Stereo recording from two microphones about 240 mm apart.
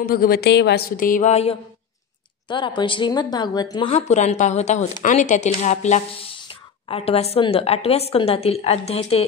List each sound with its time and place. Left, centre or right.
0.0 s a woman's voice: left